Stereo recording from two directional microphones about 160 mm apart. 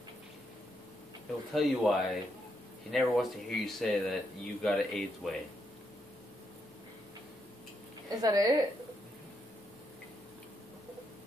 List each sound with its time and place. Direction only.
1.5 s speech: centre (ahead or behind)
8.2 s a woman's voice: 25° right (ahead or behind)